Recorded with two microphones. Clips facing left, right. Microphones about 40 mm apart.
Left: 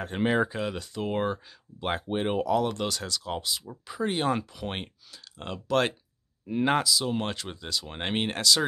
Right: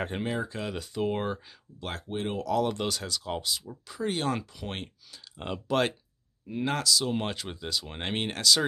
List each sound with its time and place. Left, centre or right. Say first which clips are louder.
0.2 s speech: left 12 dB; left
0.5 s speech: left 3 dB; centre
1.8 s speech: left 5 dB; left
2.5 s speech: left 1 dB; centre
3.6 s speech: left 2 dB; centre
5.4 s speech: left 1 dB; centre
6.5 s speech: left 6 dB; left
6.8 s speech: even; centre